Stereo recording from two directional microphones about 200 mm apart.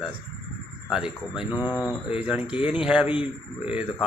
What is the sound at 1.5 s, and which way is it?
Speech, 20° left (ahead or behind).